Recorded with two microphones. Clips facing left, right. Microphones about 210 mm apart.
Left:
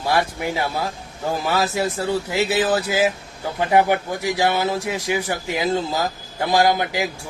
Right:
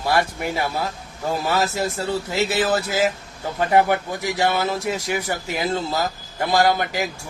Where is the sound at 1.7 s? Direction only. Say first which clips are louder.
Left 2 dB; 15° left (ahead or behind).